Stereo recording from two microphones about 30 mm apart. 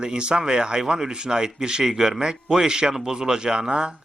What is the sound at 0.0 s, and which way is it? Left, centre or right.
Speech, right.